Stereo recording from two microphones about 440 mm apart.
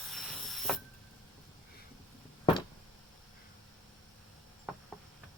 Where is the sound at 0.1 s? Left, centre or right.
Centre.